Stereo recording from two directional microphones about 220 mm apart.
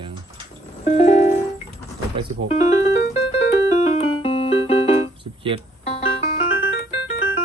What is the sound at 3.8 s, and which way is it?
Keyboard, 30° left (ahead or behind).